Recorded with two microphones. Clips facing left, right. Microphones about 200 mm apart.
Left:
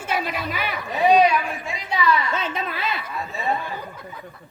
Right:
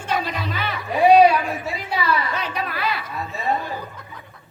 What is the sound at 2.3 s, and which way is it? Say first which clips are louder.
Speech: even; 25° left (ahead or behind).